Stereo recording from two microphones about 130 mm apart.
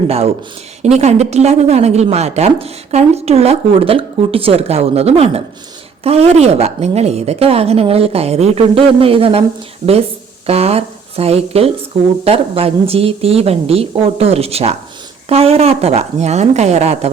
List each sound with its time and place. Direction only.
0.9 s speech: 55° right (ahead or behind)
10.4 s speech: 50° right (ahead or behind)